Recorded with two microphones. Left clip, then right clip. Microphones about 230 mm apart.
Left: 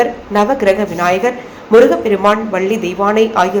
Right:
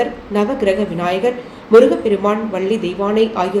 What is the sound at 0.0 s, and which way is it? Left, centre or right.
A woman's voice, centre.